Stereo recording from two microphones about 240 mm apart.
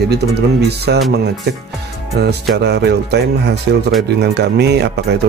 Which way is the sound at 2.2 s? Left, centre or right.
Right.